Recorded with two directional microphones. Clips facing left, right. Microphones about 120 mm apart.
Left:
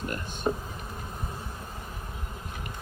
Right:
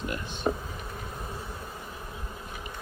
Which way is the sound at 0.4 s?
10° left (ahead or behind).